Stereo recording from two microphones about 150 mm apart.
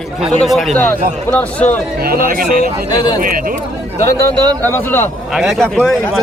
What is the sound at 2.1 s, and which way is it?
Speech, 75° right (ahead or behind).